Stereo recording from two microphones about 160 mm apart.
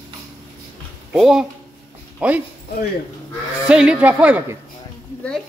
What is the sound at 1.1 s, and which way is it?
Speech, centre (ahead or behind).